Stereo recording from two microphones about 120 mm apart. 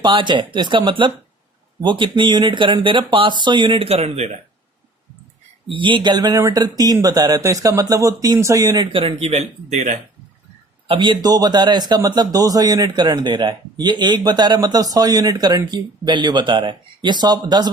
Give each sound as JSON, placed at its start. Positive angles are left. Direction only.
{"t": 0.0, "sound": "speech", "side_deg": -40}
{"t": 5.6, "sound": "a man's voice", "side_deg": -45}
{"t": 8.9, "sound": "speech", "side_deg": -50}
{"t": 10.8, "sound": "a man's voice", "side_deg": -45}